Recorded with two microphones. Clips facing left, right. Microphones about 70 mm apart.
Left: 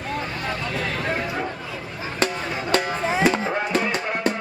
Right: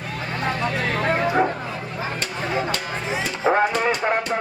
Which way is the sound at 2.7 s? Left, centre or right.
Left.